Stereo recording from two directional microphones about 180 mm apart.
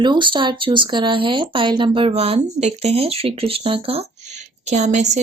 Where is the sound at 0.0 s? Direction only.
25° right (ahead or behind).